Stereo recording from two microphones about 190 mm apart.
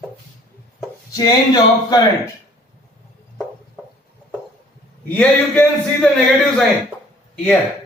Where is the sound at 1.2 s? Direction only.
20° left (ahead or behind).